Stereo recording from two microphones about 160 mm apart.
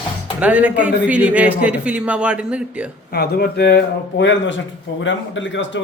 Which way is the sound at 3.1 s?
75° left (ahead or behind).